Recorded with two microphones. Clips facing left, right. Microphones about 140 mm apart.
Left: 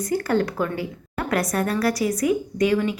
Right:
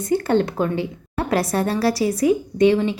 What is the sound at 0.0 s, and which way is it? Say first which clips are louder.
A woman's voice: right 3 dB; 25° right (ahead or behind).